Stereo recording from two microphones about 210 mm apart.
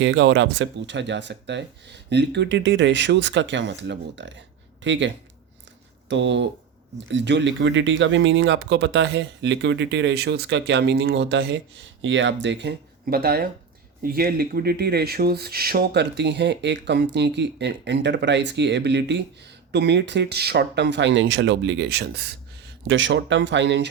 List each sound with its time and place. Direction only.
0.0 s speech: 60° right (ahead or behind)
22.9 s speech: 60° right (ahead or behind)